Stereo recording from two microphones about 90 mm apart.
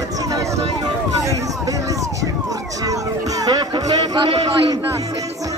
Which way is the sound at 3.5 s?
55° right (ahead or behind).